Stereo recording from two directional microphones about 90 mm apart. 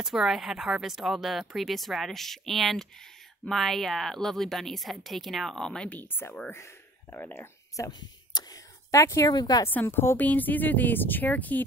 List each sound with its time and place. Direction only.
0.0 s speech: 5° right (ahead or behind)
5.9 s speech: 25° left (ahead or behind)
7.7 s a sound: 45° left (ahead or behind)
8.9 s speech: 30° left (ahead or behind)
9.2 s speech: 45° left (ahead or behind)
9.7 s speech: 25° left (ahead or behind)